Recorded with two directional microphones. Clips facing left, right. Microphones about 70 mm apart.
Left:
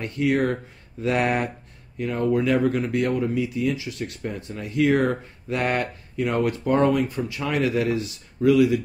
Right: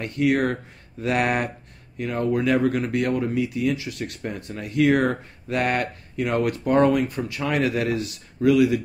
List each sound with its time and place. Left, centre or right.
0.0 s speech: right